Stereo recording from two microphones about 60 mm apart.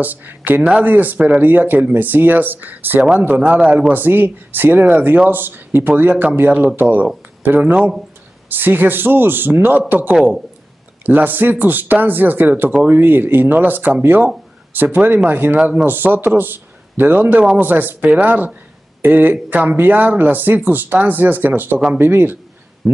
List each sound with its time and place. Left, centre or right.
0.0 s speech: right
3.9 s speech: right